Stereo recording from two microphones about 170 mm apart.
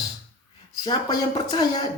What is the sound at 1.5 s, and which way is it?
Speech, 25° left (ahead or behind).